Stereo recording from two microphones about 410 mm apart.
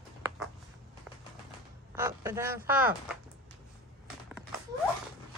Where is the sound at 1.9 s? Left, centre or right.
Centre.